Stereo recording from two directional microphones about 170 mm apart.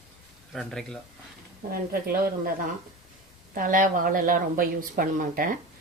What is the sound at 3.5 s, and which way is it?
A woman's voice, 55° right (ahead or behind).